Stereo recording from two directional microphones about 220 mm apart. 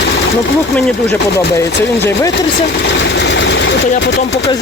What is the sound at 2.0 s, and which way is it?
Speech, 10° left (ahead or behind).